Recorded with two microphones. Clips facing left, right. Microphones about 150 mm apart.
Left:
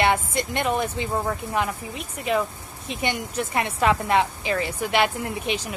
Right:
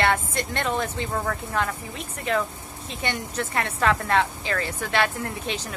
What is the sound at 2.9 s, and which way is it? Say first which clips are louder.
Speech: left 3 dB; 15° left (ahead or behind).